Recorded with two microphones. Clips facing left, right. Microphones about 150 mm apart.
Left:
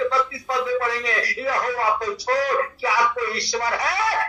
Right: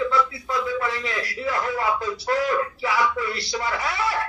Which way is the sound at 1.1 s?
40° left (ahead or behind).